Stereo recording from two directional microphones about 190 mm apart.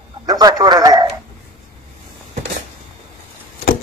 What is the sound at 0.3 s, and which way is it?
Speech, 20° right (ahead or behind).